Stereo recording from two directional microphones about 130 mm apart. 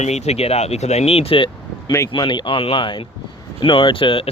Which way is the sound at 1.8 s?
25° left (ahead or behind).